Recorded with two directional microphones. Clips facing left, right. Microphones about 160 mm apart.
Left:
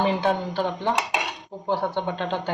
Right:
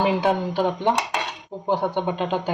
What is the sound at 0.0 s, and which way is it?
Speech, 10° right (ahead or behind).